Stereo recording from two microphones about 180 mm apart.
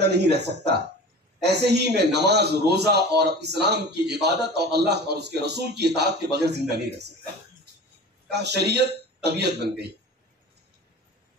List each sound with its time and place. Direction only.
0.0 s a man's voice: 70° right (ahead or behind)
8.3 s a man's voice: 70° right (ahead or behind)